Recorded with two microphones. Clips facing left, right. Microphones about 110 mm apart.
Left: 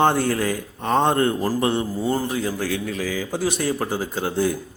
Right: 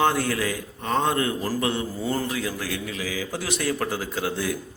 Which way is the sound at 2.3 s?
35° left (ahead or behind).